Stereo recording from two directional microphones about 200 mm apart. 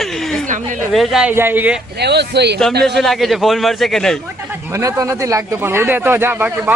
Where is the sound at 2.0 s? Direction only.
55° right (ahead or behind).